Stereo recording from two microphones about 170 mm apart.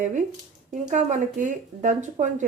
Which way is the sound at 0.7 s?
45° right (ahead or behind).